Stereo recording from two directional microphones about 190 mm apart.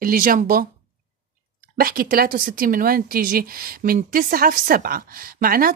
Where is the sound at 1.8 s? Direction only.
50° right (ahead or behind).